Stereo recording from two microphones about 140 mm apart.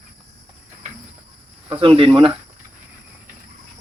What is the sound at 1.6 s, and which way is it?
Speech, 40° right (ahead or behind).